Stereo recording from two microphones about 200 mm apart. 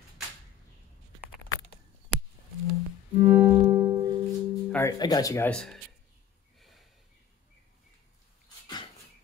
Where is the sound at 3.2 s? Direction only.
10° right (ahead or behind).